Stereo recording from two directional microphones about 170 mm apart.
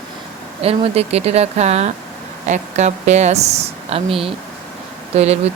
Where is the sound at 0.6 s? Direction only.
35° right (ahead or behind).